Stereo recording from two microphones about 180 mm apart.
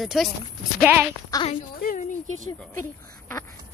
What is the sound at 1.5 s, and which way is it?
Speech, 50° left (ahead or behind).